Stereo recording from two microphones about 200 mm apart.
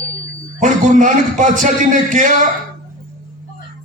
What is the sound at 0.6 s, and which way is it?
A man's voice, 40° right (ahead or behind).